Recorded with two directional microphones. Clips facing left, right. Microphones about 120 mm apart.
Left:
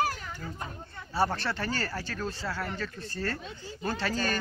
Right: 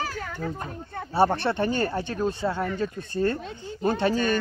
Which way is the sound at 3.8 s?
20° right (ahead or behind).